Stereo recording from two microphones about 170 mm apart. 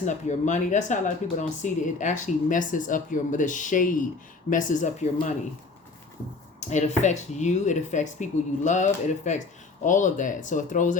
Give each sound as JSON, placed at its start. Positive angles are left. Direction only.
{"t": 0.0, "sound": "speech", "side_deg": 45}
{"t": 6.6, "sound": "speech", "side_deg": 45}